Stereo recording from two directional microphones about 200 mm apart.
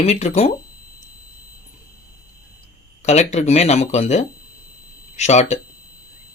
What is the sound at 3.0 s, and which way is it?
Speech, 35° left (ahead or behind).